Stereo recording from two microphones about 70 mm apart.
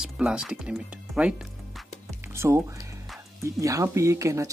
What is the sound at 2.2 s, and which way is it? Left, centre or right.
Music, right.